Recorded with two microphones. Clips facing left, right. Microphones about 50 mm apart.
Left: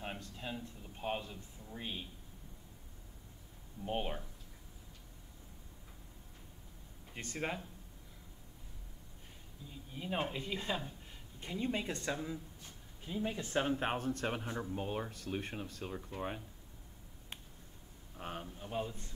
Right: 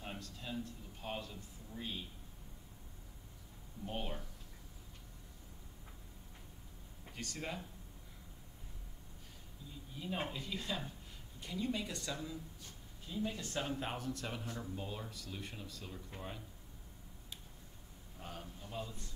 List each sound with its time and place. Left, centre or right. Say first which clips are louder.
0.0 s a man's voice: left 3 dB; left
3.8 s a man's voice: left 5 dB; left
7.2 s speech: left 4 dB; left
9.9 s a man's voice: left 3 dB; left
13.6 s speech: left 7 dB; left
18.1 s speech: left 5 dB; left